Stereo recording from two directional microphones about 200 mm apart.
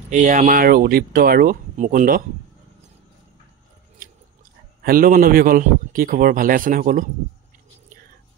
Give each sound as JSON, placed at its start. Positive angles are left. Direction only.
{"t": 0.1, "sound": "a man's voice", "side_deg": -40}
{"t": 4.0, "sound": "chewing", "side_deg": -45}
{"t": 4.8, "sound": "a man's voice", "side_deg": -45}